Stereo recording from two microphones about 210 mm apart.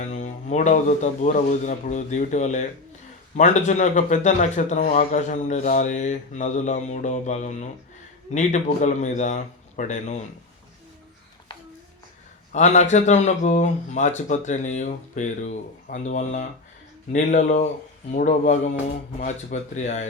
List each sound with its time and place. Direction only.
0.0 s a man's voice: 35° left (ahead or behind)
12.5 s a man's voice: 35° left (ahead or behind)